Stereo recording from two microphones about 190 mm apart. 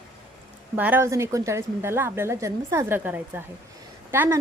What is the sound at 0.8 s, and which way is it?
A woman's voice, 10° right (ahead or behind).